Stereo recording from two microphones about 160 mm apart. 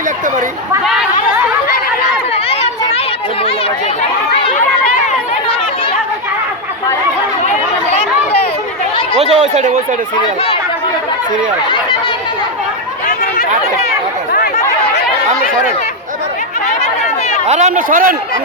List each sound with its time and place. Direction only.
2.3 s a sound: 40° left (ahead or behind)
7.4 s chatter: 40° left (ahead or behind)
9.1 s chatter: 40° right (ahead or behind)
17.4 s speech: 45° right (ahead or behind)